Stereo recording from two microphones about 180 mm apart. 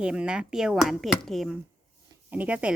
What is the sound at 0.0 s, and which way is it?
A woman's voice, 5° right (ahead or behind).